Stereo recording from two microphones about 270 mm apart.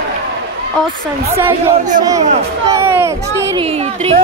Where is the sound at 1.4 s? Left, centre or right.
Centre.